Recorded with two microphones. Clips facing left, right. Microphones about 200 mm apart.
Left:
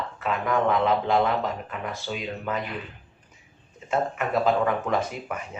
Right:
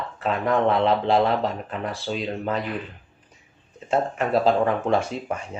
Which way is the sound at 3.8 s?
30° right (ahead or behind).